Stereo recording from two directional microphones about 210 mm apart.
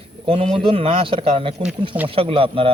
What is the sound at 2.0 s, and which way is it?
Speech, 25° right (ahead or behind).